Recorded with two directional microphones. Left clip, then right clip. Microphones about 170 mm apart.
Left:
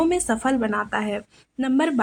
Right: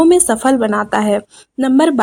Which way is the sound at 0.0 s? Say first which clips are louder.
Right 10 dB; 45° right (ahead or behind).